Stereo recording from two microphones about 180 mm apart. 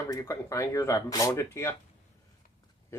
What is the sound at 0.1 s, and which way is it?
Speech, 20° left (ahead or behind).